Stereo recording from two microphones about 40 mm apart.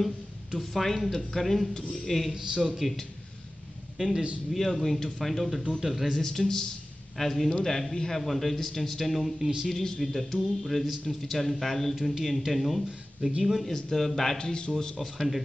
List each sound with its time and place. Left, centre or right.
0.6 s speech: centre
2.3 s speech: centre
4.0 s a man's voice: right
4.7 s speech: centre
5.7 s speech: centre
6.1 s speech: centre
11.9 s speech: centre
13.7 s speech: centre
14.4 s a man's voice: centre
15.0 s speech: centre